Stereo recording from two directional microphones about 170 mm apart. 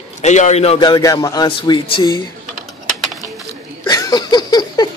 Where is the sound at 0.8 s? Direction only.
20° left (ahead or behind).